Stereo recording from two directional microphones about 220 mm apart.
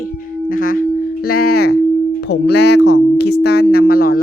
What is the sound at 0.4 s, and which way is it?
Singing bowl, 40° left (ahead or behind).